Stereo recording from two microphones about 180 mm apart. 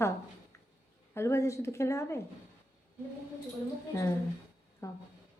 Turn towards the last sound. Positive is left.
turn(degrees=15)  # may be behind; listen again after turning